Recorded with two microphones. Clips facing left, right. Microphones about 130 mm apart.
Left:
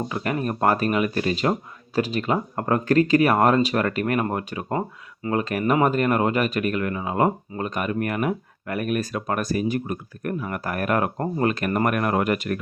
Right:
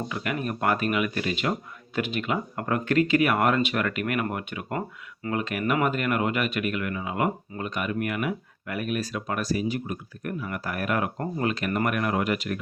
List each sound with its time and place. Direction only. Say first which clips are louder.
0.1 s speech: left 4 dB; 35° left (ahead or behind)